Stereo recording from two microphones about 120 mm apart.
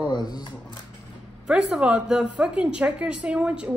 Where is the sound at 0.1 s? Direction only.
35° left (ahead or behind).